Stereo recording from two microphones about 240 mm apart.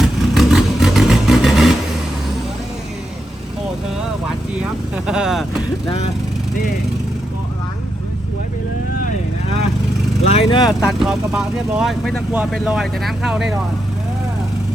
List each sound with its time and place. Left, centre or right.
0.0 s vehicle: centre
4.6 s speech: centre
10.2 s speech: left
10.8 s speech: centre